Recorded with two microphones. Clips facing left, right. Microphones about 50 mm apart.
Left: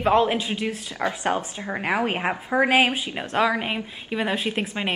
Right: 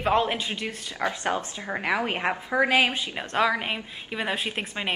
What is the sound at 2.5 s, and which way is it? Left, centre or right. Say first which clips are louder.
Speech: left 3 dB; left.